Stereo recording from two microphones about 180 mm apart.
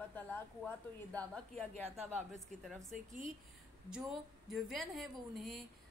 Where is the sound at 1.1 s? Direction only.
5° left (ahead or behind).